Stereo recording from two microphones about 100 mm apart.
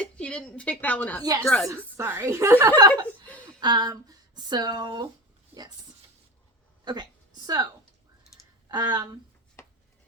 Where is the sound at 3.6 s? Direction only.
45° right (ahead or behind).